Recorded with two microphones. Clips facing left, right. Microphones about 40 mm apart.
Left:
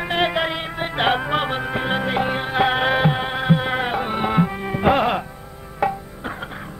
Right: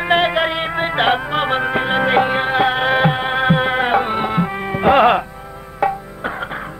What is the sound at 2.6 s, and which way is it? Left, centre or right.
Music, centre.